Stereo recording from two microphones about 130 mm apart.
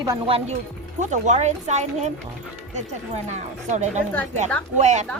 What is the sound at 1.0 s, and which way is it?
Speech, 70° right (ahead or behind).